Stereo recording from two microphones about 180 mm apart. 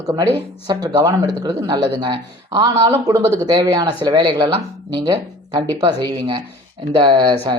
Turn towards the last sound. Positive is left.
turn(degrees=-25)  # may be behind; listen again after turning